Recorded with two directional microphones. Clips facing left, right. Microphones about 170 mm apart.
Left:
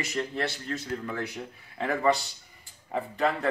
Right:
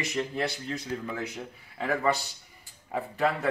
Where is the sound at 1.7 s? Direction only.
Centre (ahead or behind).